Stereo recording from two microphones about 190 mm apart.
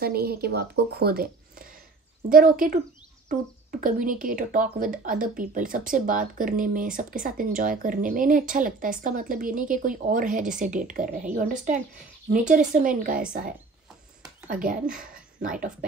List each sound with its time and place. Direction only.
0.0 s speech: 55° right (ahead or behind)